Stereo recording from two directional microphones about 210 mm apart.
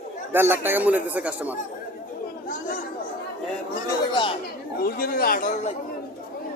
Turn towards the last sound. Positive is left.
turn(degrees=35)  # may be behind; listen again after turning